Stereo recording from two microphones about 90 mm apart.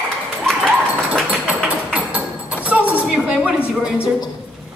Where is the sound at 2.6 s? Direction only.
15° right (ahead or behind).